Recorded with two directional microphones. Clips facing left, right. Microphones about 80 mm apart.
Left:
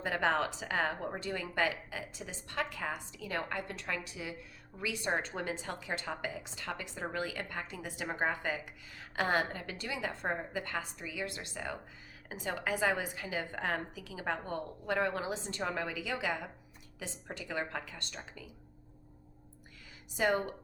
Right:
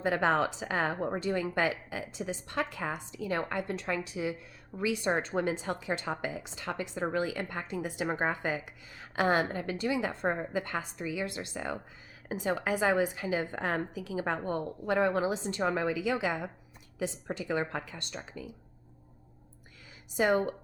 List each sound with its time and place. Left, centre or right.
0.0 s a woman's voice: right